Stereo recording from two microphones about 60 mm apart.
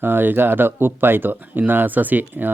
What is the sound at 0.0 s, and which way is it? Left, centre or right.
Speech, right.